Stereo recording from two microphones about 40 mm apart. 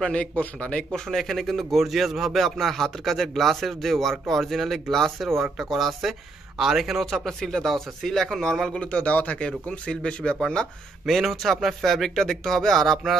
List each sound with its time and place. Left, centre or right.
0.0 s speech: left
1.1 s speech: centre
8.6 s speech: left
9.4 s speech: left
11.1 s speech: centre